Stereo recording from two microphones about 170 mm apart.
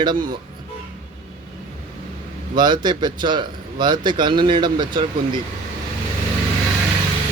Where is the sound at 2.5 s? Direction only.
25° right (ahead or behind).